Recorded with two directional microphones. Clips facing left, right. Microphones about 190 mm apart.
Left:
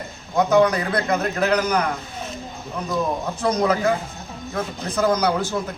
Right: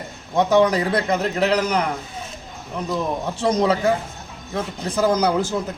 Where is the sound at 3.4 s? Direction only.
25° right (ahead or behind).